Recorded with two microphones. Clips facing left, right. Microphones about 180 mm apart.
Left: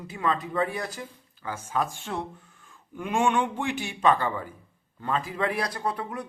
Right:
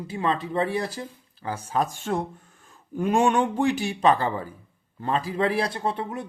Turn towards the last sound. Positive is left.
turn(degrees=-25)  # may be behind; listen again after turning